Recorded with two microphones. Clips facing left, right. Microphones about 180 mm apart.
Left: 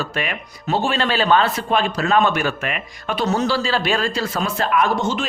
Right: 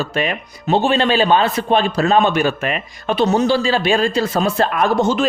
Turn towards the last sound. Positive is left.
turn(degrees=-40)  # may be behind; listen again after turning